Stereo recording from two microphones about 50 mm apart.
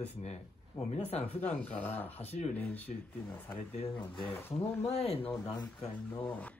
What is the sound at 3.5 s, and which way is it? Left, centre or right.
Speech, left.